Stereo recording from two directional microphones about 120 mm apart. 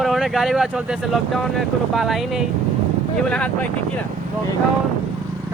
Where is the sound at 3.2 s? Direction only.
10° left (ahead or behind).